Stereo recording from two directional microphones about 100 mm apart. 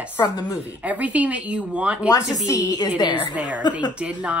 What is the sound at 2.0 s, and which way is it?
Speech, 35° left (ahead or behind).